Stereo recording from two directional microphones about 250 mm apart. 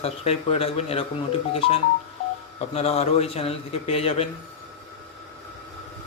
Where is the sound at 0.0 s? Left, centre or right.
Left.